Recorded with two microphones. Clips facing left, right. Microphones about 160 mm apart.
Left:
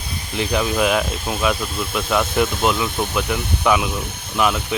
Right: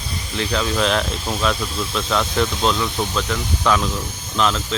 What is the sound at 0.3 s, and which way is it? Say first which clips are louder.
Speech: left 2 dB; 15° left (ahead or behind).